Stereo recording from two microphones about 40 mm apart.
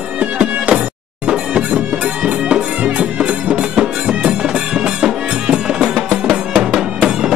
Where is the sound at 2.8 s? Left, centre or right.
Right.